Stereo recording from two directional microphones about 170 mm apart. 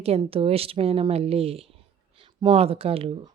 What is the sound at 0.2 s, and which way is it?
A woman's voice, 35° right (ahead or behind).